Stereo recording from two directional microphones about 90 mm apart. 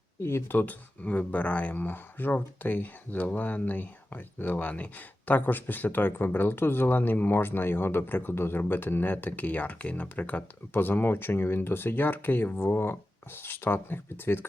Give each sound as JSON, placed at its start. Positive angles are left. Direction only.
{"t": 0.2, "sound": "speech", "side_deg": 30}